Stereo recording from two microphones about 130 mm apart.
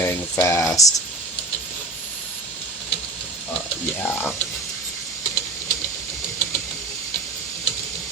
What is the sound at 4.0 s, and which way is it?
Speech, 15° left (ahead or behind).